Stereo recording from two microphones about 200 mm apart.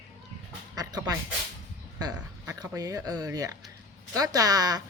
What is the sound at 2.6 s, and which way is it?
A woman's voice, 20° right (ahead or behind).